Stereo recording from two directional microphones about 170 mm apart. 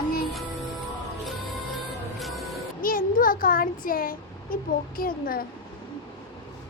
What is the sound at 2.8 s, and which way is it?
Speech, 55° left (ahead or behind).